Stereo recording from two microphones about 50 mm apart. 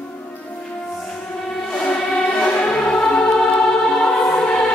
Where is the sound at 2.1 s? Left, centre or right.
Centre.